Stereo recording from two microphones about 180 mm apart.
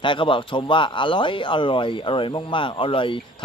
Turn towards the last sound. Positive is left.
turn(degrees=30)  # may be behind; listen again after turning